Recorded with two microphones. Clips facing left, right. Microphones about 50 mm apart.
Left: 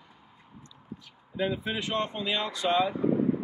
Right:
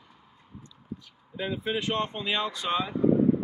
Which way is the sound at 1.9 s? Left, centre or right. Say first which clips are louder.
Right 1 dB; centre.